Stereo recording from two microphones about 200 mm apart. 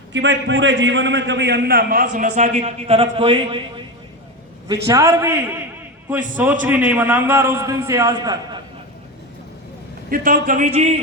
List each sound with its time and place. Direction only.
0.1 s a man's voice: 65° right (ahead or behind); by 3.8 s 25° right (ahead or behind)
4.9 s a man's voice: 15° right (ahead or behind)
10.1 s speech: 45° right (ahead or behind)